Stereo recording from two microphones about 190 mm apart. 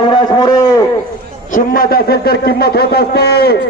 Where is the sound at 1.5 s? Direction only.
45° left (ahead or behind).